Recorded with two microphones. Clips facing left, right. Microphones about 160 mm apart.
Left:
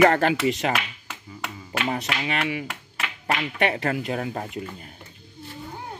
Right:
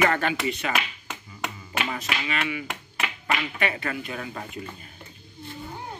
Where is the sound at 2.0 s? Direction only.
65° left (ahead or behind).